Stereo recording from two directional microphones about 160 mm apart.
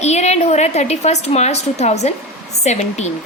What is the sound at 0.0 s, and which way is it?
A woman's voice, 45° left (ahead or behind).